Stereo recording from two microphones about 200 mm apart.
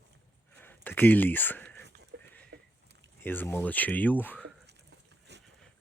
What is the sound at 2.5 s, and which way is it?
Rowboat, 65° right (ahead or behind).